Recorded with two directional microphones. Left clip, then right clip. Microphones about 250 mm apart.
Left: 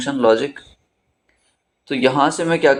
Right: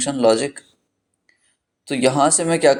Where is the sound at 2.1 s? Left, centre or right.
Right.